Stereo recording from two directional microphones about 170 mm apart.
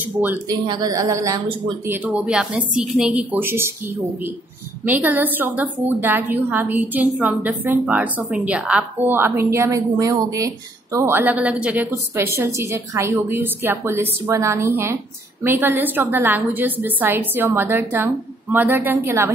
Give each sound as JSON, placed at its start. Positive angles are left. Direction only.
{"t": 0.0, "sound": "speech", "side_deg": -10}
{"t": 0.5, "sound": "a woman's voice", "side_deg": -25}